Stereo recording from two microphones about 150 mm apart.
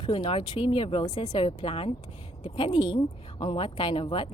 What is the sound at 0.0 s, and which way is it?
A woman's voice, 35° left (ahead or behind).